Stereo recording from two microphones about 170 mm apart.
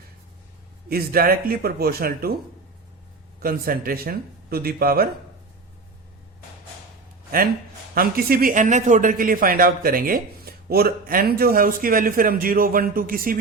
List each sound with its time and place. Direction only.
0.9 s a man's voice: 60° right (ahead or behind)
3.4 s a man's voice: 60° right (ahead or behind)
7.9 s a man's voice: 60° right (ahead or behind)